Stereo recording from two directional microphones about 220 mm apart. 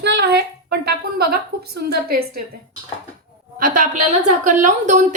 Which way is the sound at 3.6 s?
35° right (ahead or behind).